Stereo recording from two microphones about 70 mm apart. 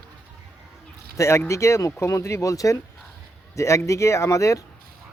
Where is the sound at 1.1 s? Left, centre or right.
Left.